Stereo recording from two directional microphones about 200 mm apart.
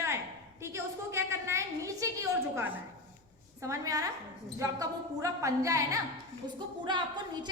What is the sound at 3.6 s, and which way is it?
A woman's voice, 15° right (ahead or behind).